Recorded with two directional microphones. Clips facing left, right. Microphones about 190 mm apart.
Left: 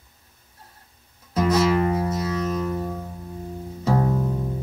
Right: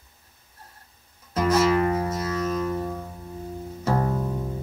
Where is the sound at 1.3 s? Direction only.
Centre (ahead or behind).